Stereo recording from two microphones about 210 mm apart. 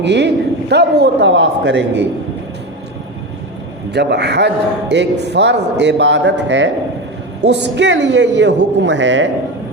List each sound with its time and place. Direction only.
0.0 s a man's voice: 55° right (ahead or behind)
3.9 s a man's voice: 55° right (ahead or behind)